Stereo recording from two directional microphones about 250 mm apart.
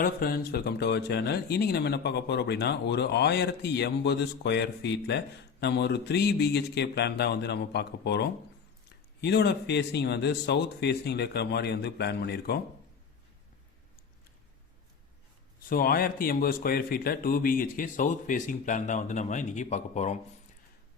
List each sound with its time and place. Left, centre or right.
0.0 s speech: left
15.7 s speech: left